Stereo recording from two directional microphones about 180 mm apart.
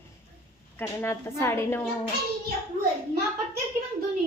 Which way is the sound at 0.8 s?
15° left (ahead or behind).